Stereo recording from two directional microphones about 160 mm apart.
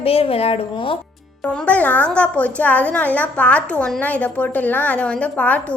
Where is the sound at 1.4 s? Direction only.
10° left (ahead or behind).